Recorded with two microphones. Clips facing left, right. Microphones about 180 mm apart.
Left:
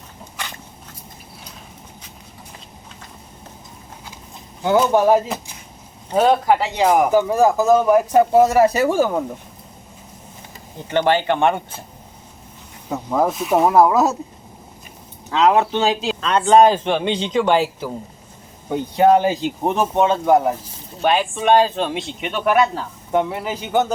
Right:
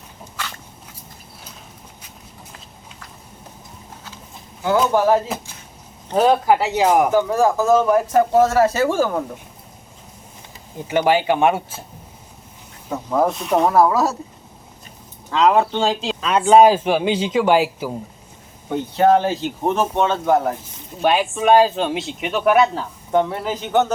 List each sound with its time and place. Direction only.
0.4 s dog: 20° left (ahead or behind)
4.6 s speech: 20° left (ahead or behind)
6.2 s speech: 5° right (ahead or behind)
7.1 s speech: 15° left (ahead or behind)
10.8 s speech: 10° right (ahead or behind)
13.1 s speech: 5° left (ahead or behind)
13.7 s speech: 15° left (ahead or behind)
15.3 s speech: centre (ahead or behind)
18.7 s speech: 15° left (ahead or behind)
21.0 s speech: 5° right (ahead or behind)